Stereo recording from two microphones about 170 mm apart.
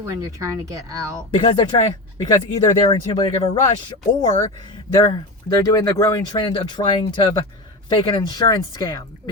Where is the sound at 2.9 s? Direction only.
35° left (ahead or behind).